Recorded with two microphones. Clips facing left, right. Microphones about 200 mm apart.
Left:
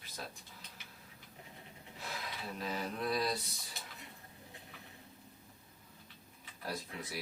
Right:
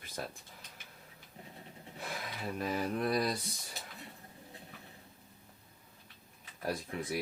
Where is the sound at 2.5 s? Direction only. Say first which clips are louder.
Right 6 dB; 50° right (ahead or behind).